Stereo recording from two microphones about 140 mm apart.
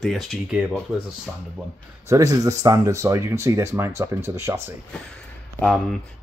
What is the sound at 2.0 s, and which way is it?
Speech, 25° right (ahead or behind).